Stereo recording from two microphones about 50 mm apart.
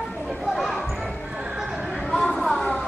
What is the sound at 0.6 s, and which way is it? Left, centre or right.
Basketball bounce, centre.